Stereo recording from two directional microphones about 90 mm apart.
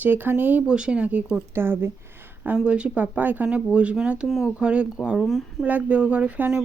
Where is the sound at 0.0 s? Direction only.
20° right (ahead or behind).